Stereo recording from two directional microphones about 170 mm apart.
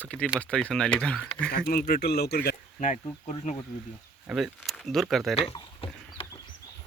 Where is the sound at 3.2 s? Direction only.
40° left (ahead or behind).